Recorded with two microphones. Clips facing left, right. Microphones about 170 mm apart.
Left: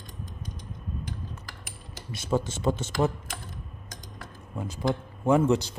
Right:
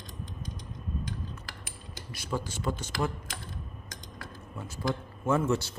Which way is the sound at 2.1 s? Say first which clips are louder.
Left 7 dB; 25° left (ahead or behind).